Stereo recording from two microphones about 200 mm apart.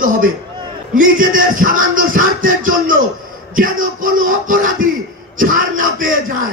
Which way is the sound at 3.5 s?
40° right (ahead or behind).